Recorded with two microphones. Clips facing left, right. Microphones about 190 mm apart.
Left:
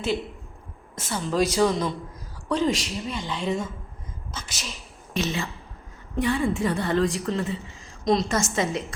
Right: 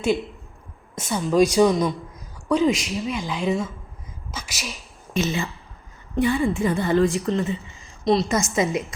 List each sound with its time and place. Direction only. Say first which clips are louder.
0.9 s a woman's voice: right 6 dB; 15° right (ahead or behind)